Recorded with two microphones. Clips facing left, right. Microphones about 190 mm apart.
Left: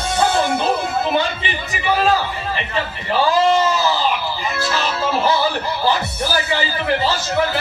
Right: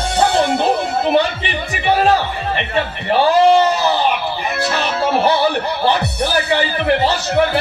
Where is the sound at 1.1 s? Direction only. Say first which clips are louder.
Right 4 dB; 60° right (ahead or behind).